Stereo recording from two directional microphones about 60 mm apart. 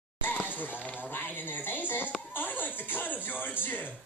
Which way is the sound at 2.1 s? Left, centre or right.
Left.